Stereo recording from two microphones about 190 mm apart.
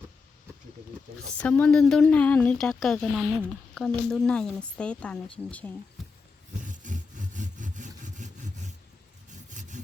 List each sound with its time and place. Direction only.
1.4 s speech: 5° left (ahead or behind)
6.0 s a sound: centre (ahead or behind)
6.6 s sawing: 40° right (ahead or behind)